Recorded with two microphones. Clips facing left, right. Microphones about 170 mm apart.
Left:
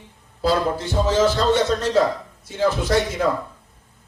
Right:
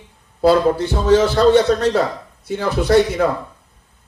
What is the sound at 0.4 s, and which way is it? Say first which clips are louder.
Speech: right 7 dB; 60° right (ahead or behind).